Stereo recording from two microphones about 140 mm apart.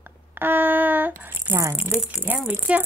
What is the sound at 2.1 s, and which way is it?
Rattle, 10° right (ahead or behind).